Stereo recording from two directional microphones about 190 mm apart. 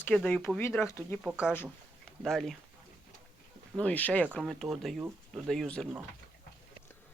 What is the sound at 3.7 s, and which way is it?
Speech, 5° left (ahead or behind).